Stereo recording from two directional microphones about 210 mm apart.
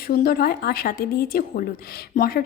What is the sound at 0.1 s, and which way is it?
A woman's voice, 45° left (ahead or behind).